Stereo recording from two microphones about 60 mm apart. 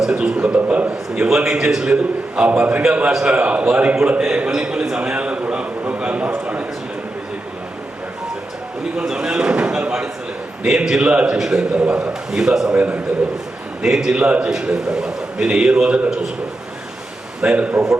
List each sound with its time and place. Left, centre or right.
0.0 s a man's voice: centre
0.3 s a sound: right
1.1 s a man's voice: centre
9.0 s a man's voice: centre
11.3 s a man's voice: centre
13.8 s a man's voice: centre
17.4 s a man's voice: centre